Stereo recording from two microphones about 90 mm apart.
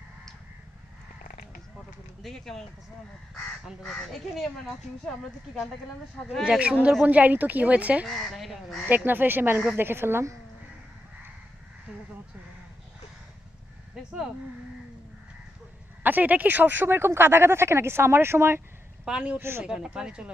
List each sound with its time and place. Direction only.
2.2 s a woman's voice: 5° left (ahead or behind)
3.8 s a woman's voice: 5° left (ahead or behind)
6.4 s speech: 15° right (ahead or behind)
8.1 s a woman's voice: centre (ahead or behind)
8.8 s speech: 20° right (ahead or behind)
16.0 s speech: 20° right (ahead or behind)
19.0 s speech: 10° right (ahead or behind)
19.3 s speech: 25° right (ahead or behind)
19.6 s speech: 10° right (ahead or behind)